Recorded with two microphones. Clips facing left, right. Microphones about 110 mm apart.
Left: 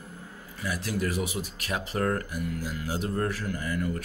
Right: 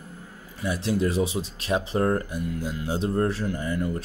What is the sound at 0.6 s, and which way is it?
Speech, 25° right (ahead or behind).